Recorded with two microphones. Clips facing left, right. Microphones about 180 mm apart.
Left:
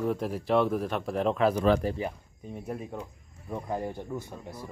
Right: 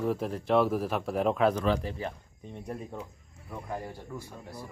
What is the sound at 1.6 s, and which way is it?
Speech, 45° left (ahead or behind).